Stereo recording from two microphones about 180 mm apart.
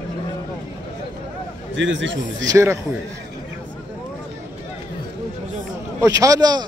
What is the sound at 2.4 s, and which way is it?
Speech, 15° right (ahead or behind).